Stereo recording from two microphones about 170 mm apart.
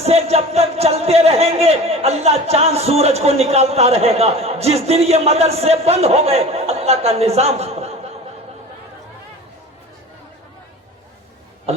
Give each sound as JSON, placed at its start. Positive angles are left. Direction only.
{"t": 0.0, "sound": "speech", "side_deg": -35}